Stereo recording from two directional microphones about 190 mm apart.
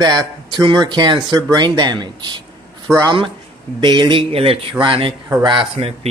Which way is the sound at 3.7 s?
25° right (ahead or behind).